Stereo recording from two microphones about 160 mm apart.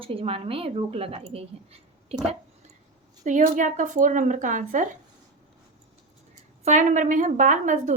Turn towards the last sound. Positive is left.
turn(degrees=-50)  # may be behind; listen again after turning